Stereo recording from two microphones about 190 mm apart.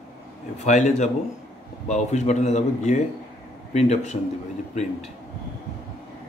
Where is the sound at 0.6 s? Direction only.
40° left (ahead or behind).